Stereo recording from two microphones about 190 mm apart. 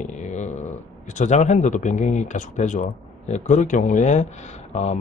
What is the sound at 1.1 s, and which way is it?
Speech, 40° left (ahead or behind).